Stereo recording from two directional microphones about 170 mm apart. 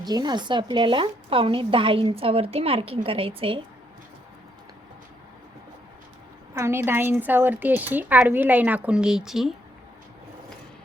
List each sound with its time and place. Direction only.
0.1 s a woman's voice: 25° right (ahead or behind)
6.5 s a woman's voice: 15° right (ahead or behind)